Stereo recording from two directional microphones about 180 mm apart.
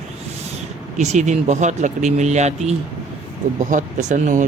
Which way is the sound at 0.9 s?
40° right (ahead or behind).